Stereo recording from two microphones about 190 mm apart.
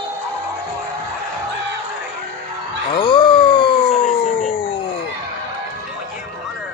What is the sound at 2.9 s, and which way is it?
Groan, 25° left (ahead or behind).